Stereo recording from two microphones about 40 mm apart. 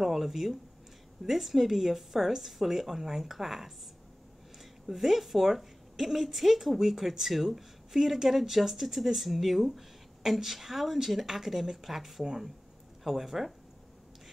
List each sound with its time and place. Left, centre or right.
0.0 s a woman's voice: centre
4.8 s a woman's voice: centre